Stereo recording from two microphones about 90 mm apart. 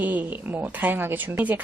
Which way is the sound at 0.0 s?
20° right (ahead or behind).